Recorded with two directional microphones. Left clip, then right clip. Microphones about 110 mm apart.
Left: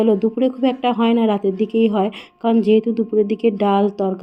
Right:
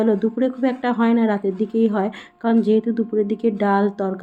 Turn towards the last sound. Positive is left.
turn(degrees=30)  # may be behind; listen again after turning